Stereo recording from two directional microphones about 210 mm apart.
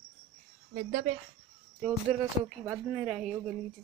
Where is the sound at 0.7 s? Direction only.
45° right (ahead or behind).